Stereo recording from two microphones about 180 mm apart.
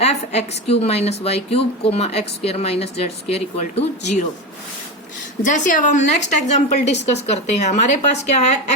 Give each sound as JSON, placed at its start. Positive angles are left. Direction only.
{"t": 0.0, "sound": "a woman's voice", "side_deg": 35}
{"t": 5.4, "sound": "a woman's voice", "side_deg": 45}